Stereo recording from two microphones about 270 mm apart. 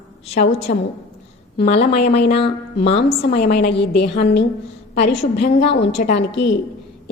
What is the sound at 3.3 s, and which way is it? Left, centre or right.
A woman's voice, left.